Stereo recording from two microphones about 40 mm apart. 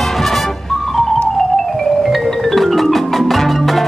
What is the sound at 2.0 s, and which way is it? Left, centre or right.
Music, centre.